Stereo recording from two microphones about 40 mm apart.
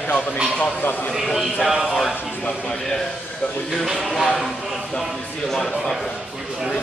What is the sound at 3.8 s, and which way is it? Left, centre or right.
Speech, centre.